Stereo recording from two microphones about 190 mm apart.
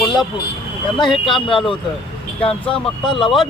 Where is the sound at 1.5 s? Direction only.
25° left (ahead or behind).